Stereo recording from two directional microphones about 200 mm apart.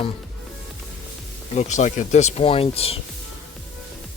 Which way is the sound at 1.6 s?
35° left (ahead or behind).